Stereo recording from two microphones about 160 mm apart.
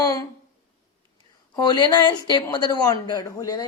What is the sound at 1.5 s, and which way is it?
A woman's voice, 25° left (ahead or behind).